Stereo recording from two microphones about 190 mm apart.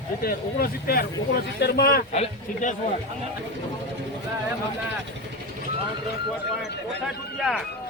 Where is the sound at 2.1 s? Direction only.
35° left (ahead or behind).